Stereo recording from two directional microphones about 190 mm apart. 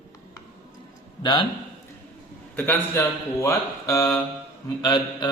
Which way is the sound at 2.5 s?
10° left (ahead or behind).